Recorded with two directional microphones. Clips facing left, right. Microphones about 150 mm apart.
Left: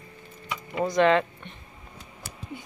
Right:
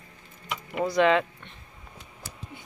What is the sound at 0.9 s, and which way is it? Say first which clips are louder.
Speech: left 1 dB; 5° right (ahead or behind).